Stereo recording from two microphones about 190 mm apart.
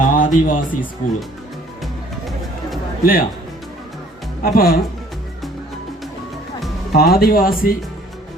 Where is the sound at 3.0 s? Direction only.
50° left (ahead or behind).